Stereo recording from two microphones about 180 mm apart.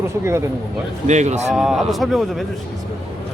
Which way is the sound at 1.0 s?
40° right (ahead or behind).